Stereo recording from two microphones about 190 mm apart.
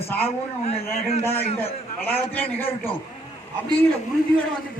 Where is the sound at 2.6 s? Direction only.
30° left (ahead or behind).